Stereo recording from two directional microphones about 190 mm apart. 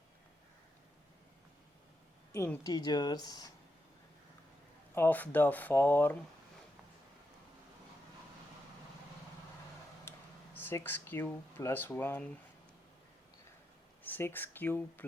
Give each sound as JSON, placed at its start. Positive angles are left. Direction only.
{"t": 2.3, "sound": "speech", "side_deg": 15}
{"t": 4.9, "sound": "speech", "side_deg": 10}
{"t": 10.1, "sound": "speech", "side_deg": 10}
{"t": 14.0, "sound": "speech", "side_deg": 10}